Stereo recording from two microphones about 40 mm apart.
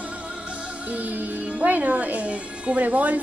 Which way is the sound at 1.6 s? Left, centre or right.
Right.